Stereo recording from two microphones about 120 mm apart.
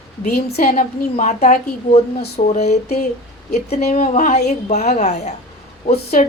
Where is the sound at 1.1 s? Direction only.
70° left (ahead or behind).